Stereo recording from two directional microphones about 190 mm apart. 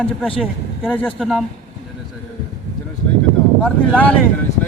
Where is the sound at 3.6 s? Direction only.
5° left (ahead or behind).